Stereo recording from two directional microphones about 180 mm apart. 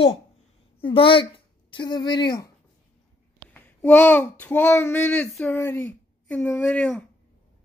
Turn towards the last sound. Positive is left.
turn(degrees=5)  # may be behind; listen again after turning